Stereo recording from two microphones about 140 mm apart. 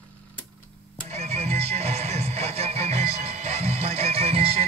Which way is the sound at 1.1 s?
50° right (ahead or behind).